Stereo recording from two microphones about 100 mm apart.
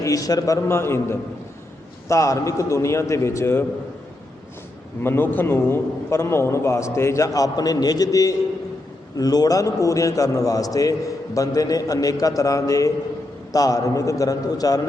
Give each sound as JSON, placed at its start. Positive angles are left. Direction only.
{"t": 0.0, "sound": "a man's voice", "side_deg": 35}
{"t": 5.0, "sound": "a man's voice", "side_deg": 20}